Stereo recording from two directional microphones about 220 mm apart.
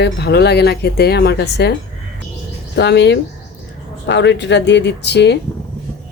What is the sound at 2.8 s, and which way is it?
Speech, 50° left (ahead or behind).